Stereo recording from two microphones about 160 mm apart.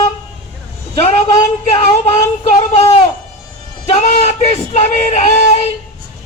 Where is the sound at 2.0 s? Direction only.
40° left (ahead or behind).